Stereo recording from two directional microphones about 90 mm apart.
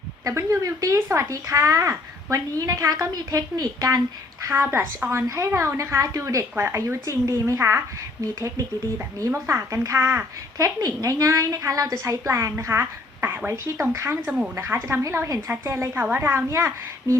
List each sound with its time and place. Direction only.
0.3 s speech: 35° right (ahead or behind)
4.4 s a woman's voice: 30° right (ahead or behind)
10.8 s a woman's voice: 40° right (ahead or behind)
14.3 s speech: 10° right (ahead or behind)
14.5 s a woman's voice: 30° right (ahead or behind)